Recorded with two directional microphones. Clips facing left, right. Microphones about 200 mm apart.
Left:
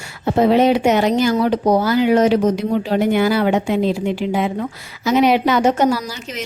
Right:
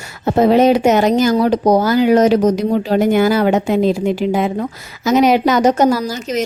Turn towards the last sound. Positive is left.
turn(degrees=-40)  # may be behind; listen again after turning